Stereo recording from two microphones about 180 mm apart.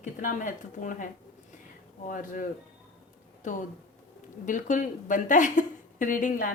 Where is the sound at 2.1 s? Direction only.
45° left (ahead or behind).